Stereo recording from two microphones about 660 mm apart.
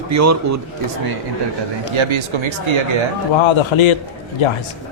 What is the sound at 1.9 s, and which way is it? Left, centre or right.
Speech, right.